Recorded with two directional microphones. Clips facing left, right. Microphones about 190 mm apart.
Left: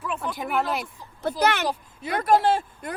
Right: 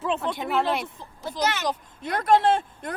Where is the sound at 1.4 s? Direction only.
60° left (ahead or behind).